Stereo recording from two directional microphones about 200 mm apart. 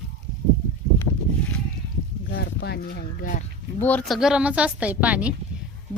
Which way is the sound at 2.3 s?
55° left (ahead or behind).